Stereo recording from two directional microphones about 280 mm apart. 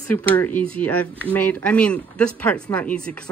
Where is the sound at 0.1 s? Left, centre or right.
Centre.